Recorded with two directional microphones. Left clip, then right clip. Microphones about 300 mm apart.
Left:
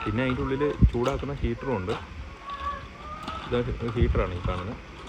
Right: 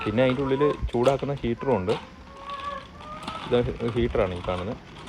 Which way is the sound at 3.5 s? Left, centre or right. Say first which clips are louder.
Right 5 dB; right.